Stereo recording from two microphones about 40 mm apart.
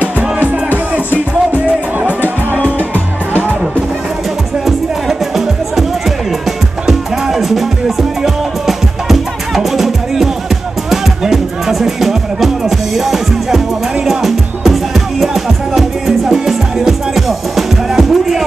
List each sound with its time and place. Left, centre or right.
0.0 s music: right
2.0 s music: right
4.6 s music: centre